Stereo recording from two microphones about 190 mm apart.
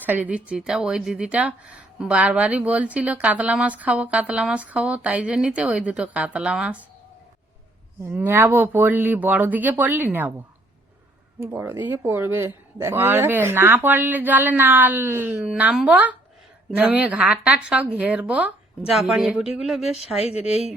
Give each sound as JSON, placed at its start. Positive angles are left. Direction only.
{"t": 0.0, "sound": "a woman's voice", "side_deg": -10}
{"t": 8.0, "sound": "a woman's voice", "side_deg": -10}
{"t": 11.3, "sound": "a woman's voice", "side_deg": -10}
{"t": 20.1, "sound": "speech", "side_deg": 35}